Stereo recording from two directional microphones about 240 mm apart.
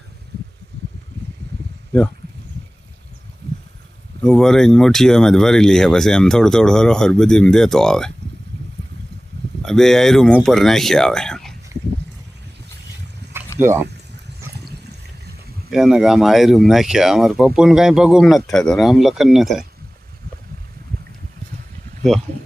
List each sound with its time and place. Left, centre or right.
0.7 s a sound: right
4.2 s speech: centre
9.6 s speech: centre
13.6 s speech: centre
15.7 s speech: centre